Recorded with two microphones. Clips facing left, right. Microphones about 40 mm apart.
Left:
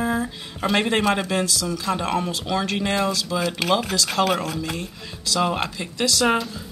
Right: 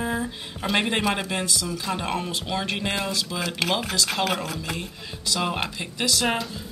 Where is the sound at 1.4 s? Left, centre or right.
Right.